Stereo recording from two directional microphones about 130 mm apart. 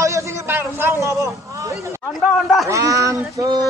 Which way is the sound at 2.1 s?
Centre (ahead or behind).